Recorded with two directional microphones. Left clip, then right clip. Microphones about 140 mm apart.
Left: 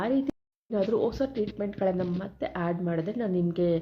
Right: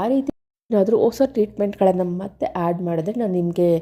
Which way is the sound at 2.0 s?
40° right (ahead or behind).